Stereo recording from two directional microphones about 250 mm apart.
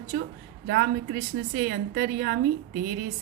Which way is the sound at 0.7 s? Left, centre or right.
Right.